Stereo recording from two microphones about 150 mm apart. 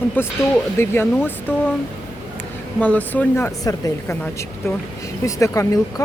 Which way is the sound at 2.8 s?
10° left (ahead or behind).